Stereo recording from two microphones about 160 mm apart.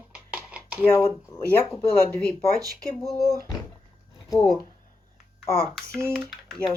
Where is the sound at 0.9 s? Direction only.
15° left (ahead or behind).